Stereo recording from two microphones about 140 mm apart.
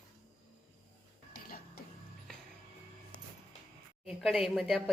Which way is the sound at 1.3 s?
90° left.